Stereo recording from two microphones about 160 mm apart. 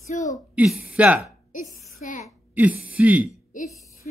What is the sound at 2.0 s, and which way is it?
Speech, 55° left (ahead or behind).